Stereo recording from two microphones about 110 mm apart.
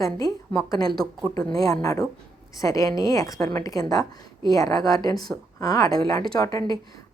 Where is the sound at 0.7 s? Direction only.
35° left (ahead or behind).